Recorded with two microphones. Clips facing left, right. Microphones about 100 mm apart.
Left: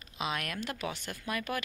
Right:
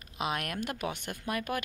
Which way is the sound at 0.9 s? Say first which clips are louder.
Right 2 dB; 15° right (ahead or behind).